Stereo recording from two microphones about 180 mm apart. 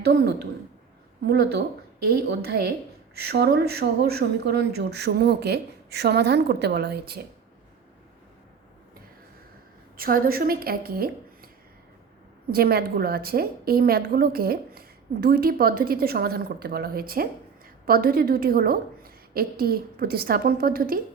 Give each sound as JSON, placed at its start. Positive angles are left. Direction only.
{"t": 0.1, "sound": "a woman's voice", "side_deg": -60}
{"t": 10.0, "sound": "a woman's voice", "side_deg": -55}
{"t": 12.5, "sound": "a woman's voice", "side_deg": -60}